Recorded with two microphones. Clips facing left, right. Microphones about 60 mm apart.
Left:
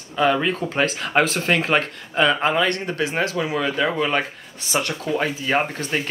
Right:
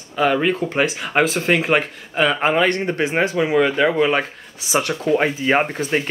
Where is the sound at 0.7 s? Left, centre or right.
Centre.